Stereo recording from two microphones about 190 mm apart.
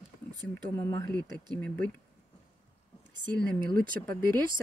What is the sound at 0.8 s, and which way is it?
Speech, 15° left (ahead or behind).